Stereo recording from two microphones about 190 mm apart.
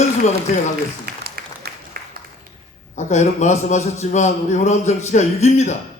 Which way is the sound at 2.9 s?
40° left (ahead or behind).